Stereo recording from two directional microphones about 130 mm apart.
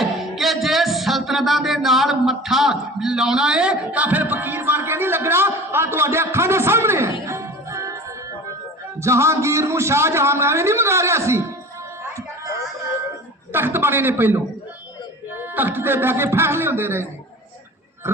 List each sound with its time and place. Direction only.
0.0 s music: centre (ahead or behind); by 7.9 s 25° right (ahead or behind)
9.0 s a man's voice: 20° right (ahead or behind)
13.5 s a man's voice: 15° right (ahead or behind)